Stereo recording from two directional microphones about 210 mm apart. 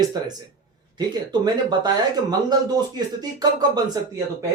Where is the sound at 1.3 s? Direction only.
20° right (ahead or behind).